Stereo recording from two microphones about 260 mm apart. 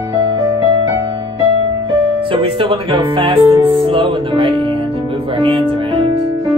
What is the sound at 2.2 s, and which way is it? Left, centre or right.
Speech, centre.